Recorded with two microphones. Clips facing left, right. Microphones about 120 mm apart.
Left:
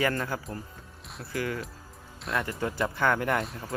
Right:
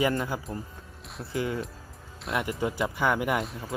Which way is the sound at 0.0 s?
15° right (ahead or behind).